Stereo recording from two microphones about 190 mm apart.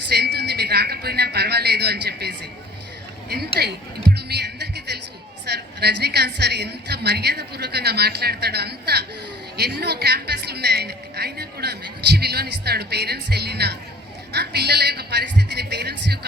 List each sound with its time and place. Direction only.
0.1 s a sound: 60° right (ahead or behind)
3.2 s a woman's voice: 55° right (ahead or behind)
4.1 s music: 60° right (ahead or behind)
5.5 s a woman's voice: 60° right (ahead or behind)